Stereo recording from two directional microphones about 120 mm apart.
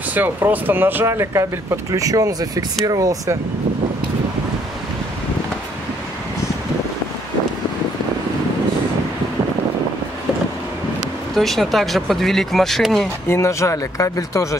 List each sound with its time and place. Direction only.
0.1 s speech: 15° right (ahead or behind)
11.3 s speech: centre (ahead or behind)
13.3 s speech: 25° left (ahead or behind)